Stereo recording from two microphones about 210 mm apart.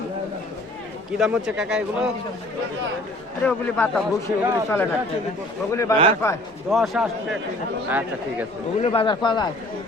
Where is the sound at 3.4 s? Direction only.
5° left (ahead or behind).